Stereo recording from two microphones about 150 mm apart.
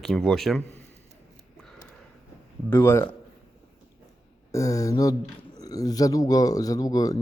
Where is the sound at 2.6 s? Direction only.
15° left (ahead or behind).